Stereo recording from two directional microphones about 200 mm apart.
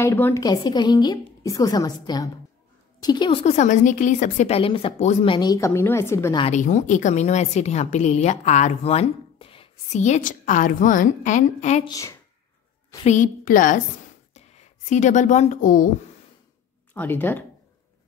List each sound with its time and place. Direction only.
0.0 s a woman's voice: 10° left (ahead or behind)
5.7 s a woman's voice: 10° left (ahead or behind)
6.4 s a woman's voice: 35° left (ahead or behind)
11.9 s a woman's voice: 15° left (ahead or behind)
13.0 s a woman's voice: 40° left (ahead or behind)
16.9 s a woman's voice: 10° left (ahead or behind)